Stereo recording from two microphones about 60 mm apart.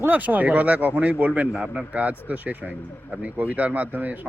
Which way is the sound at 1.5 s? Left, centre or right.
Centre.